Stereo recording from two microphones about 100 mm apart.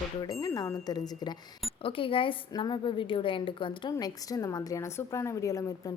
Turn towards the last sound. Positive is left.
turn(degrees=35)  # may be behind; listen again after turning